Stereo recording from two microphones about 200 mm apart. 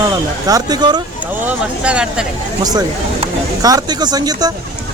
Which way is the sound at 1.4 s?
5° right (ahead or behind).